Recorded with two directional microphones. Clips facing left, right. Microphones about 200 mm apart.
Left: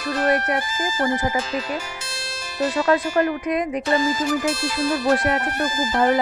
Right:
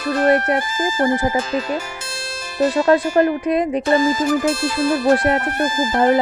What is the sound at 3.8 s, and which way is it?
Speech, 50° right (ahead or behind).